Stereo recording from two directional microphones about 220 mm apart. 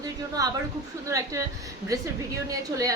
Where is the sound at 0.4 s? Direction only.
15° right (ahead or behind).